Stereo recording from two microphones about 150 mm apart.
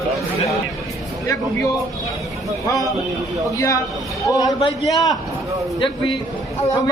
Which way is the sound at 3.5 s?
20° left (ahead or behind).